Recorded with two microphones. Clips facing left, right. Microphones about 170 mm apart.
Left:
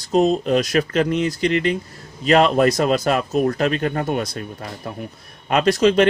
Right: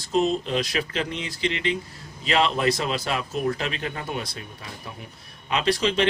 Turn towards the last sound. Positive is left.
turn(degrees=45)  # may be behind; listen again after turning